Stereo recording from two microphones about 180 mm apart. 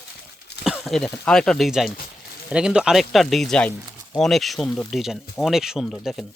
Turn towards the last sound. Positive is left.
turn(degrees=0)  # may be behind; listen again after turning